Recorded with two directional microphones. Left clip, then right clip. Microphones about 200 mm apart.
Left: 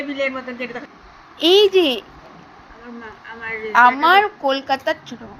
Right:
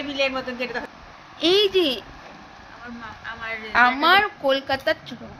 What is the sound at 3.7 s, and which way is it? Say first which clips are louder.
A woman's voice: left 4 dB; 10° left (ahead or behind).